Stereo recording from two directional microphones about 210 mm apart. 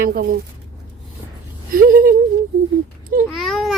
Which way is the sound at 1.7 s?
40° right (ahead or behind).